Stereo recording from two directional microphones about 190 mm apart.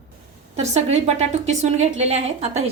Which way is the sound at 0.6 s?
35° right (ahead or behind).